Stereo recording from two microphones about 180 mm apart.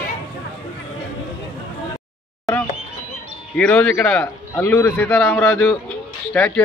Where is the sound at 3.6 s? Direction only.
5° left (ahead or behind).